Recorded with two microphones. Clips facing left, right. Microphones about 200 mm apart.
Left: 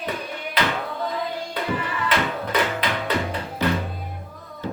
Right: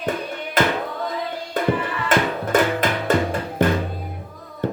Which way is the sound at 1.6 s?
45° right (ahead or behind).